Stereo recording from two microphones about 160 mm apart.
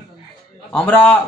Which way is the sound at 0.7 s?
10° left (ahead or behind).